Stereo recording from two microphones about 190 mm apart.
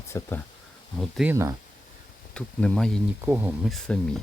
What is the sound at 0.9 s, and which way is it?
Speech, centre (ahead or behind).